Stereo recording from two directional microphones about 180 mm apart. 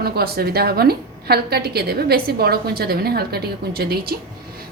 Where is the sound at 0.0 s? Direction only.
60° right (ahead or behind).